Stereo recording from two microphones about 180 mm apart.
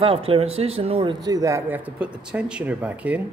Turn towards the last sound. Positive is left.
turn(degrees=-10)  # may be behind; listen again after turning